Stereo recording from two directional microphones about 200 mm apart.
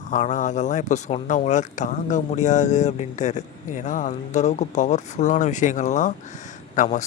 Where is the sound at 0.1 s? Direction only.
40° left (ahead or behind).